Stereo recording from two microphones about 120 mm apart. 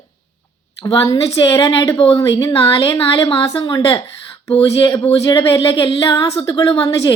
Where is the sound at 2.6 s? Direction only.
55° left (ahead or behind).